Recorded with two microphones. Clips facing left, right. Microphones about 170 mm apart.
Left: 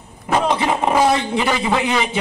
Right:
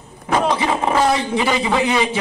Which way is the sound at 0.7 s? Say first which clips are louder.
Left 1 dB; 15° left (ahead or behind).